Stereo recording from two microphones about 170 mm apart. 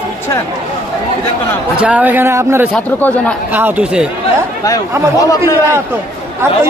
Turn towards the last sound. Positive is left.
turn(degrees=-15)  # may be behind; listen again after turning